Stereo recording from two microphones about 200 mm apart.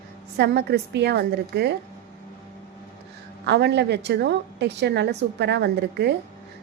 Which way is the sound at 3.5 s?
55° right (ahead or behind).